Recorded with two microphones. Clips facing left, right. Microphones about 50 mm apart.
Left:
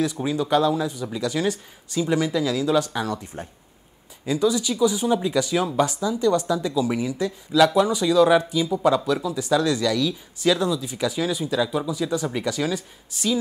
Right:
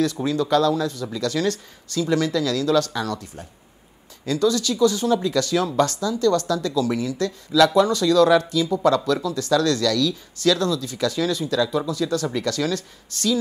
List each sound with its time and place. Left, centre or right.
0.0 s speech: centre
4.3 s speech: centre